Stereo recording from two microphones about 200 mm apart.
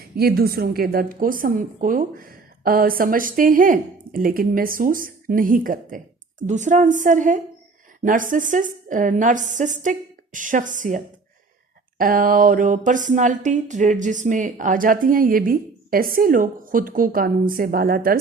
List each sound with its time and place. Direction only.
0.0 s a woman's voice: 50° right (ahead or behind)